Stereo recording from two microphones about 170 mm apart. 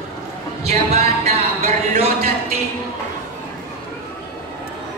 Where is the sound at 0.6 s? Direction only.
40° right (ahead or behind).